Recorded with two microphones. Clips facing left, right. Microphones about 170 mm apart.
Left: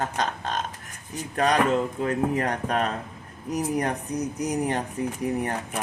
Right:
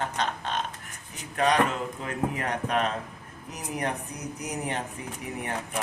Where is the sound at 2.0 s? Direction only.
40° left (ahead or behind).